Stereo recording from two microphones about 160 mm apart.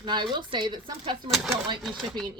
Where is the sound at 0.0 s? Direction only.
30° right (ahead or behind).